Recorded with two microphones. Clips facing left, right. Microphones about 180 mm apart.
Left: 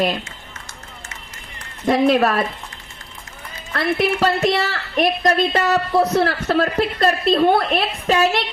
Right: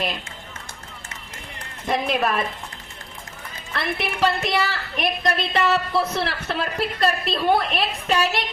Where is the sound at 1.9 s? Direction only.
40° left (ahead or behind).